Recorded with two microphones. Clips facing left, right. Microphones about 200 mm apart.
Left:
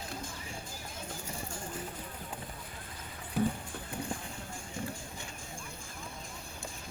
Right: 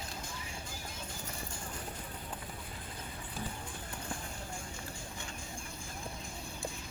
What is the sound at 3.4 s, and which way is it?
Music, 65° left (ahead or behind).